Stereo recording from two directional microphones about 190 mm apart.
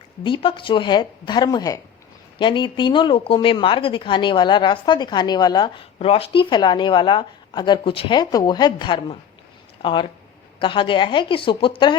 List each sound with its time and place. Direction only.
0.2 s speech: 25° left (ahead or behind)